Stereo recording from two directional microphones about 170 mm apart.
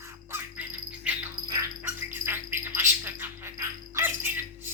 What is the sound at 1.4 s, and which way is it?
Music, 25° right (ahead or behind).